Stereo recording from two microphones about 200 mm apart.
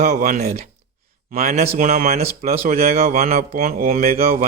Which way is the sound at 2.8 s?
30° right (ahead or behind).